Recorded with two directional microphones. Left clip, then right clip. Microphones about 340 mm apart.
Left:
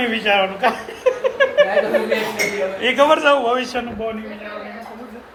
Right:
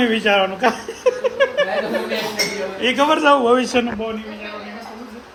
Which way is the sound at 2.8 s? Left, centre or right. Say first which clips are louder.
Left 2 dB; centre.